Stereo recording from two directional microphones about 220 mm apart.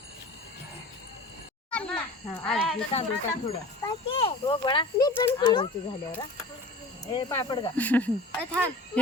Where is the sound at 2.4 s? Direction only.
Centre (ahead or behind).